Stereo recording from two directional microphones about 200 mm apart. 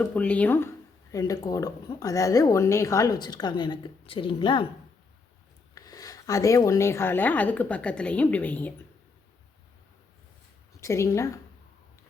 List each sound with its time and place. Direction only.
0.0 s a woman's voice: 5° left (ahead or behind); by 4.6 s 25° left (ahead or behind)
5.7 s speech: 20° left (ahead or behind)
10.8 s speech: 15° left (ahead or behind)